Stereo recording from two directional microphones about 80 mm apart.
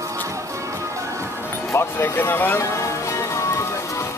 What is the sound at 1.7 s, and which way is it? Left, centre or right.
Speech, left.